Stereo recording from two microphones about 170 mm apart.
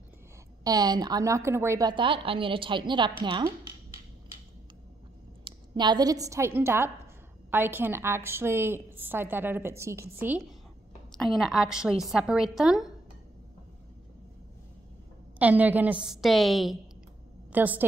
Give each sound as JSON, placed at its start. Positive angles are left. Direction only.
{"t": 0.7, "sound": "a woman's voice", "side_deg": -25}
{"t": 5.4, "sound": "a woman's voice", "side_deg": -25}
{"t": 11.1, "sound": "a woman's voice", "side_deg": 0}
{"t": 15.3, "sound": "a woman's voice", "side_deg": -10}
{"t": 17.5, "sound": "a woman's voice", "side_deg": -10}